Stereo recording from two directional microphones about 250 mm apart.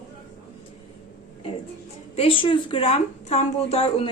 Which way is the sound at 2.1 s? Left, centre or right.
Left.